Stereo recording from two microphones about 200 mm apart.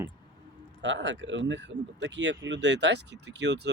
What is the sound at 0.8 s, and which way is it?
Speech, 65° right (ahead or behind).